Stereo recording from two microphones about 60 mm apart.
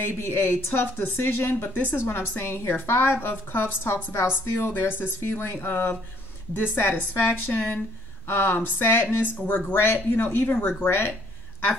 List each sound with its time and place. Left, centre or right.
0.0 s a woman's voice: left